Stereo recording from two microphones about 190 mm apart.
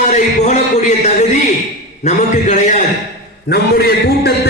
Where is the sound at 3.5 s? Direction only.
55° left (ahead or behind).